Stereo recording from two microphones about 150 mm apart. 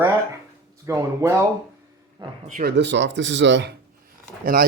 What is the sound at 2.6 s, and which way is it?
Speech, 55° right (ahead or behind).